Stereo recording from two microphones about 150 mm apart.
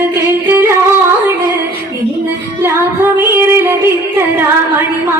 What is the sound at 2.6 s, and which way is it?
Music, 15° right (ahead or behind).